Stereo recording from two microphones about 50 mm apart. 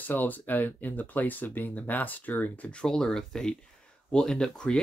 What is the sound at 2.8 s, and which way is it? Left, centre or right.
Speech, centre.